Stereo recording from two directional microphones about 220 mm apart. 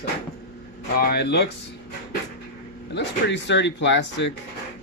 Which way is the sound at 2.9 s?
50° left (ahead or behind).